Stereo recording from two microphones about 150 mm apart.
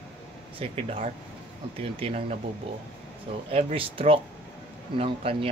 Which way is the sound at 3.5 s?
40° right (ahead or behind).